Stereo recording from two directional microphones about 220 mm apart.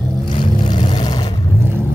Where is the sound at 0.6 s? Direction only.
20° left (ahead or behind).